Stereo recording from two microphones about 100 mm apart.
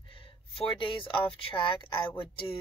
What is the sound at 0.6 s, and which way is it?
Speech, 55° left (ahead or behind).